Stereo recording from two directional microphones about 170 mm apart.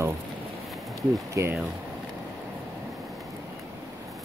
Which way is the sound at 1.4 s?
15° right (ahead or behind).